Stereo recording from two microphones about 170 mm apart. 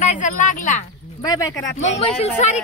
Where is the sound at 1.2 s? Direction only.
20° left (ahead or behind).